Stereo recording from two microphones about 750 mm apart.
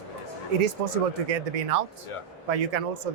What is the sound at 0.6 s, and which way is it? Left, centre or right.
Speech, right.